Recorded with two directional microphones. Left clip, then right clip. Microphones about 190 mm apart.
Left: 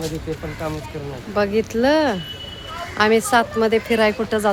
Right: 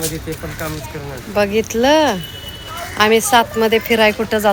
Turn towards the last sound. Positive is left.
turn(degrees=10)  # may be behind; listen again after turning